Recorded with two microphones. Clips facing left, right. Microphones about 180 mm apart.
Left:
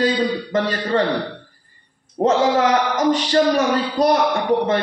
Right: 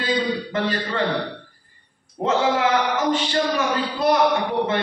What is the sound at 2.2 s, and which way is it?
Speech, 40° left (ahead or behind).